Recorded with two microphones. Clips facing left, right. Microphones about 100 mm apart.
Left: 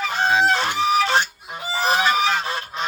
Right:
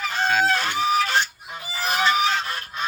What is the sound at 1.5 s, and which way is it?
Goose, 25° left (ahead or behind).